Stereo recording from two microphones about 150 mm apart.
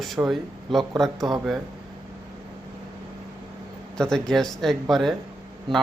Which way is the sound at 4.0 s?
5° left (ahead or behind).